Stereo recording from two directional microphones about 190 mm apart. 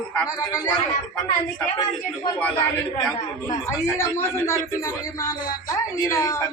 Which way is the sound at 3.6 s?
15° left (ahead or behind).